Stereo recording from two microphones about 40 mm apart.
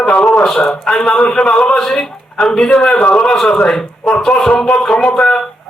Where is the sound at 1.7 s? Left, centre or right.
Centre.